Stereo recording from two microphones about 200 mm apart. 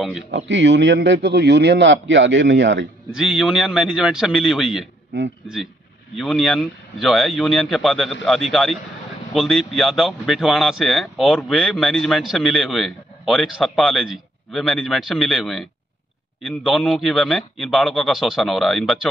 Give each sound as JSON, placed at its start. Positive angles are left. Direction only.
{"t": 0.5, "sound": "a man's voice", "side_deg": -65}
{"t": 3.2, "sound": "speech", "side_deg": 0}
{"t": 6.1, "sound": "speech", "side_deg": 0}